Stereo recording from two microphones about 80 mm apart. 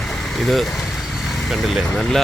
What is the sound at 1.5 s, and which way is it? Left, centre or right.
Speech, centre.